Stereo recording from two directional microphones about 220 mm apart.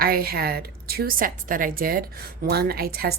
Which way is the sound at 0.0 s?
45° right (ahead or behind).